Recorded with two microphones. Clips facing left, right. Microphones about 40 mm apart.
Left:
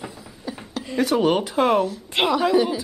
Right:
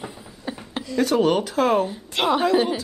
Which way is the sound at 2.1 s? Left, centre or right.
Left.